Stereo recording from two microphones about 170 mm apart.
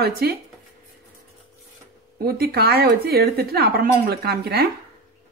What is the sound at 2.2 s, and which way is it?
A woman's voice, 65° right (ahead or behind).